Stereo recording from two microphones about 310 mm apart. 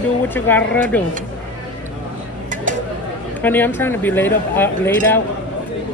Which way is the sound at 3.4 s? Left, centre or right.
Centre.